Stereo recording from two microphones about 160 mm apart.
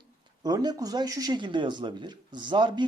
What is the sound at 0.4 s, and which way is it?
Speech, 25° right (ahead or behind).